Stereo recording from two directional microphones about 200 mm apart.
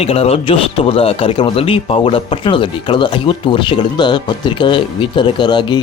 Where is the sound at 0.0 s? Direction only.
30° left (ahead or behind).